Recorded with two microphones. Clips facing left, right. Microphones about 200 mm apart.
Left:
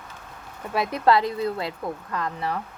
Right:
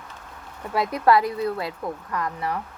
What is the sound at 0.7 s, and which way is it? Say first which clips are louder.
Speech: right 1 dB; 25° left (ahead or behind).